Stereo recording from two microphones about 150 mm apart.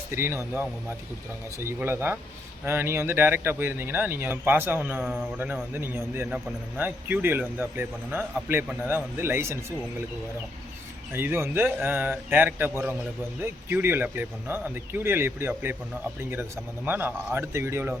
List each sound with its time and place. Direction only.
0.1 s a man's voice: 15° right (ahead or behind)
11.1 s a man's voice: 15° right (ahead or behind)